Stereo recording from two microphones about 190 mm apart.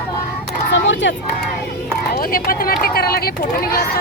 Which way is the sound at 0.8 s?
75° left (ahead or behind).